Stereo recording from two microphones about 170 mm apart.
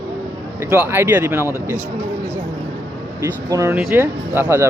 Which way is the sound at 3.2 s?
20° right (ahead or behind).